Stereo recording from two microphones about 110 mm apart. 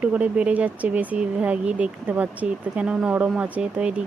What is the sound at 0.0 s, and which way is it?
Speech, 15° right (ahead or behind).